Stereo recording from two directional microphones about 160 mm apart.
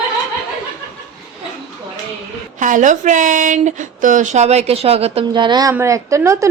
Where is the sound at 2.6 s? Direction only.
50° right (ahead or behind); by 6.4 s 20° right (ahead or behind).